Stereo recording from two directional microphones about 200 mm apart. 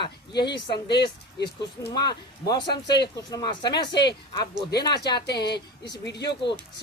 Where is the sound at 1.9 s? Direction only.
20° left (ahead or behind).